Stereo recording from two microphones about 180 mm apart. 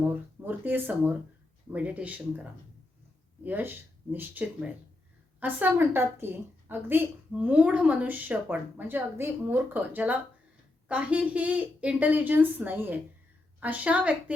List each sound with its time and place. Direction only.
0.4 s a woman's voice: 10° right (ahead or behind)